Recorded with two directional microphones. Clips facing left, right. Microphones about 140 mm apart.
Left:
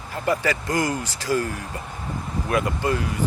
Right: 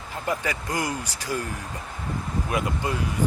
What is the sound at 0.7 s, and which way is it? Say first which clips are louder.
Speech: left 4 dB; 10° right (ahead or behind).